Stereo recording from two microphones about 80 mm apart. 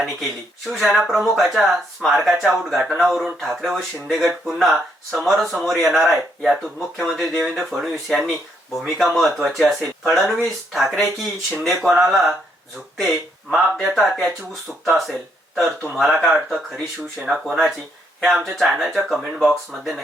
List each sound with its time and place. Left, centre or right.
0.7 s speech: centre